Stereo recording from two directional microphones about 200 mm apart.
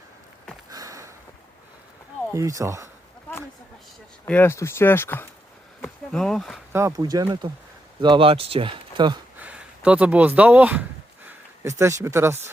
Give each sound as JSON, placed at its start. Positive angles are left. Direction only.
{"t": 0.7, "sound": "sniff", "side_deg": -15}
{"t": 2.3, "sound": "speech", "side_deg": -15}
{"t": 4.3, "sound": "speech", "side_deg": 10}
{"t": 6.7, "sound": "speech", "side_deg": -15}
{"t": 9.4, "sound": "speech", "side_deg": -5}